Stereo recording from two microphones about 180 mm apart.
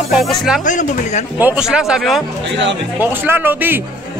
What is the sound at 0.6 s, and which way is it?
Speech, 45° left (ahead or behind).